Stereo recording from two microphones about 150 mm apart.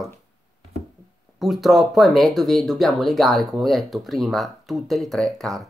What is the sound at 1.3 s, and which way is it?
Speech, centre (ahead or behind).